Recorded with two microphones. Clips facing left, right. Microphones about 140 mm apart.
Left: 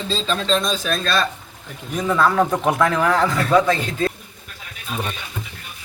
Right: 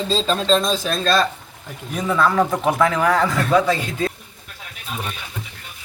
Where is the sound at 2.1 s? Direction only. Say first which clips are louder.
Even; centre (ahead or behind).